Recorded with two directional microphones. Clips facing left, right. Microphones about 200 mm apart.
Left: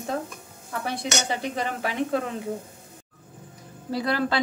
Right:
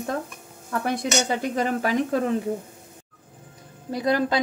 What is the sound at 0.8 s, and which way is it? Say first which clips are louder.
Dishes: right 4 dB; 45° right (ahead or behind).